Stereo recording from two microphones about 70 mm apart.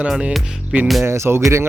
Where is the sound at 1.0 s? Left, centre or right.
Right.